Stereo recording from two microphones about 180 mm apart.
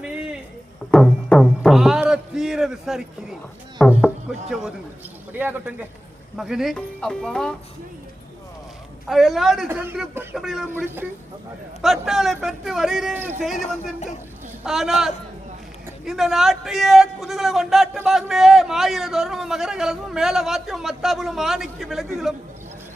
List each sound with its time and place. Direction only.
0.9 s music: 5° left (ahead or behind)
3.8 s a sound: centre (ahead or behind)
4.4 s a man's voice: centre (ahead or behind)
9.0 s a man's voice: centre (ahead or behind)
10.7 s a man's voice: 10° right (ahead or behind)
11.8 s a man's voice: centre (ahead or behind)
14.6 s a man's voice: centre (ahead or behind)